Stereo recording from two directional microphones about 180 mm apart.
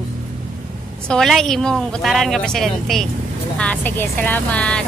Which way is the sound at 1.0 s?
Centre (ahead or behind).